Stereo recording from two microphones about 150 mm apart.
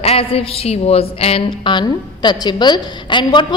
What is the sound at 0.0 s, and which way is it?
A woman's voice, 40° left (ahead or behind).